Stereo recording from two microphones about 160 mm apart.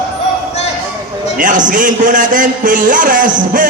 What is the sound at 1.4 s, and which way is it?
A man's voice, 55° right (ahead or behind).